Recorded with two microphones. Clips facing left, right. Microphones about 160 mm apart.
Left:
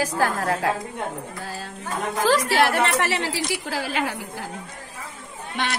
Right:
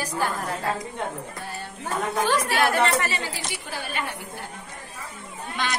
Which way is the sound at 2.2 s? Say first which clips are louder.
Left 4 dB; 90° left.